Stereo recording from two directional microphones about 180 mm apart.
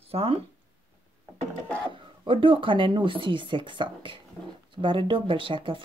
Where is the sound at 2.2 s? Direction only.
30° right (ahead or behind).